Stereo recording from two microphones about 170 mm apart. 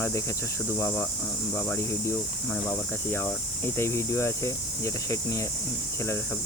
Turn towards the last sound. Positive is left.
turn(degrees=20)  # may be behind; listen again after turning